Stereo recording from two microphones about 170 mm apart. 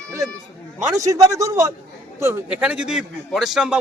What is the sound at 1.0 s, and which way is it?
A man's voice, 20° right (ahead or behind).